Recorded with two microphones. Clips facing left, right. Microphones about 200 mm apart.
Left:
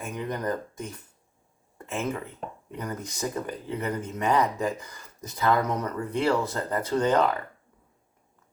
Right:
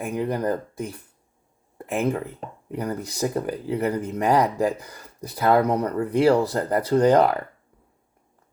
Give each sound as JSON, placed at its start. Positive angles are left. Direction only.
{"t": 0.1, "sound": "speech", "side_deg": -35}